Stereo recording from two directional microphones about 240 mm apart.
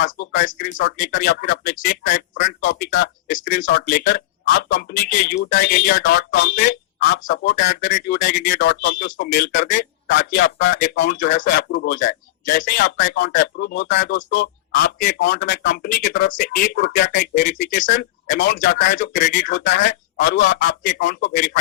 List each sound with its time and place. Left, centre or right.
0.0 s speech: left
7.9 s speech: left